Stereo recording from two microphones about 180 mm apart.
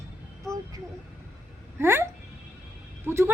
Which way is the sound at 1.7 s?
15° right (ahead or behind).